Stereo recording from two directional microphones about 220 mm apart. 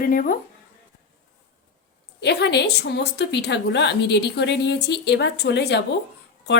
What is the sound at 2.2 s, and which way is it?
A woman's voice, 50° left (ahead or behind).